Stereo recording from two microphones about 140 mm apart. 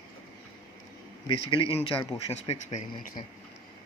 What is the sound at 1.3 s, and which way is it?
Speech, 40° left (ahead or behind).